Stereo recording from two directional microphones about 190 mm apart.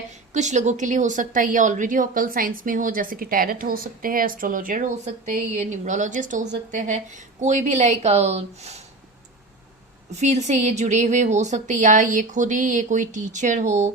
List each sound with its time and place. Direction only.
0.3 s a woman's voice: 40° right (ahead or behind)
10.2 s a woman's voice: 35° right (ahead or behind)